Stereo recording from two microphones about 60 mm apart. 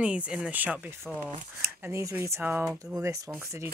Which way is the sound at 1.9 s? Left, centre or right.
Right.